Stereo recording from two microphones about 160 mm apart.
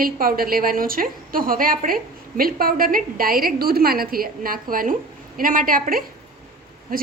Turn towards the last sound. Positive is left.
turn(degrees=-65)  # may be behind; listen again after turning